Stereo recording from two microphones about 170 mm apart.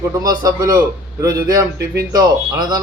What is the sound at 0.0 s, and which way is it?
A man's voice, 20° right (ahead or behind).